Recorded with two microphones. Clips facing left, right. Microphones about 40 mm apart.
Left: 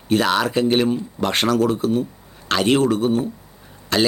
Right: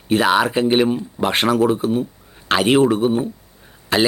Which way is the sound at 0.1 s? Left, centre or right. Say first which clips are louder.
Right 2 dB; centre.